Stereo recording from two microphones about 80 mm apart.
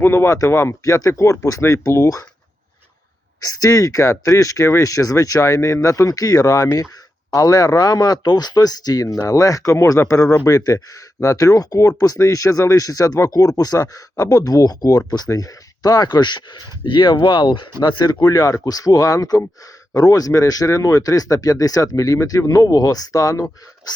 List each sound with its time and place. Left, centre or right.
0.0 s speech: left
0.3 s speech: left
3.4 s speech: left
17.2 s speech: left